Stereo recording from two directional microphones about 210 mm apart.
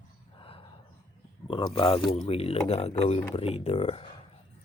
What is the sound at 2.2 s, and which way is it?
Speech, 30° left (ahead or behind).